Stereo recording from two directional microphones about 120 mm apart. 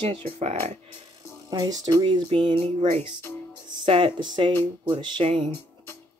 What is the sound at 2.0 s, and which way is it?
Speech, 45° right (ahead or behind).